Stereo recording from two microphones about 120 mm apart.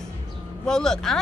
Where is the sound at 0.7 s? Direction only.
5° left (ahead or behind).